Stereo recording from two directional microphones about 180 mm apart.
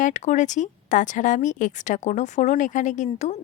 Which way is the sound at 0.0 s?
45° left (ahead or behind).